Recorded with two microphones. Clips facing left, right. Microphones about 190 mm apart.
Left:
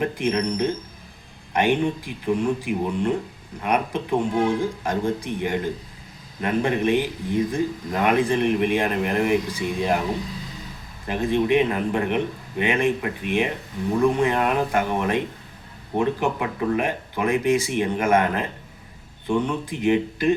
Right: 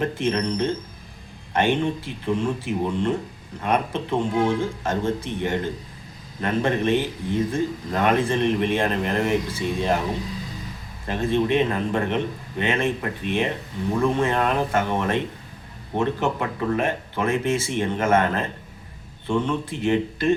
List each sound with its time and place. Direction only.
0.0 s speech: 15° left (ahead or behind)
11.0 s speech: 15° left (ahead or behind)